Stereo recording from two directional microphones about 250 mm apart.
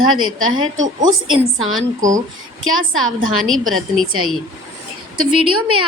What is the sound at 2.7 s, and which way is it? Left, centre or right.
A woman's voice, right.